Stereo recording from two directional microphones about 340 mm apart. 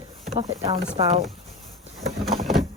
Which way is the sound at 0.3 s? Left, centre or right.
Centre.